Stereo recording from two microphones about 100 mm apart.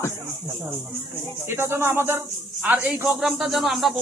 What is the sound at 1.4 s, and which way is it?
A man's voice, 25° right (ahead or behind).